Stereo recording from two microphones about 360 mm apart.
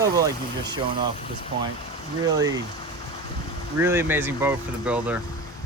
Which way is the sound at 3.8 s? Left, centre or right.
Centre.